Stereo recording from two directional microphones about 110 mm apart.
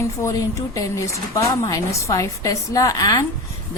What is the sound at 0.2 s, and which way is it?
A woman's voice, 30° left (ahead or behind).